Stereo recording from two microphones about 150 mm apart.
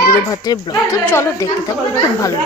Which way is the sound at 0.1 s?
25° left (ahead or behind).